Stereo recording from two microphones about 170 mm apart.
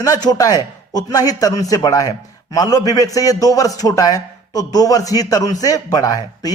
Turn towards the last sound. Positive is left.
turn(degrees=20)  # may be behind; listen again after turning